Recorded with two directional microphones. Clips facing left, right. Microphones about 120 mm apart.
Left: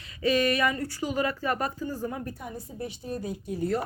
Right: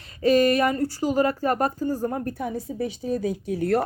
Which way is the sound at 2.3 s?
90° right.